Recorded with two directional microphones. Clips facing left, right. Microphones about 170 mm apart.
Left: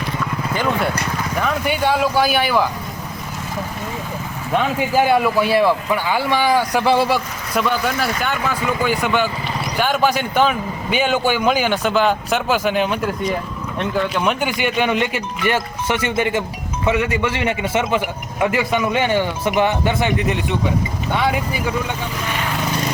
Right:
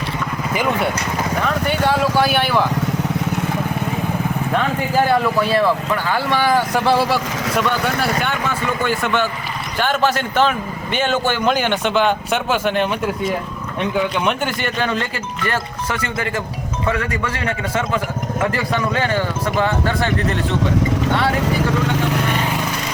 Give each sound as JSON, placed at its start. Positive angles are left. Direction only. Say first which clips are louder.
{"t": 0.5, "sound": "a man's voice", "louder": "right 1 dB", "side_deg": 0}
{"t": 4.5, "sound": "speech", "louder": "left 2 dB", "side_deg": 10}
{"t": 6.5, "sound": "a man's voice", "louder": "even", "side_deg": 0}
{"t": 8.2, "sound": "a man's voice", "louder": "even", "side_deg": 0}
{"t": 14.4, "sound": "a man's voice", "louder": "left 2 dB", "side_deg": 15}
{"t": 21.7, "sound": "speech", "louder": "right 4 dB", "side_deg": -90}